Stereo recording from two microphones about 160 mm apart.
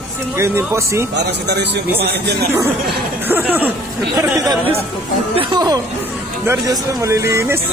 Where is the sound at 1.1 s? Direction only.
90° right.